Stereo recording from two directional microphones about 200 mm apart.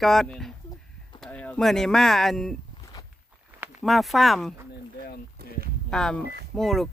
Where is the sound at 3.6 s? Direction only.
Centre (ahead or behind).